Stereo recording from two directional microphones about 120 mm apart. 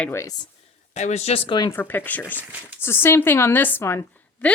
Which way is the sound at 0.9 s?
70° left (ahead or behind).